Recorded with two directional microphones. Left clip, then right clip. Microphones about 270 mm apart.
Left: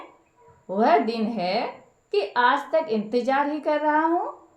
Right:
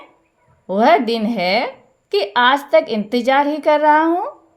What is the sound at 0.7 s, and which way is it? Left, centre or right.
A woman's voice, right.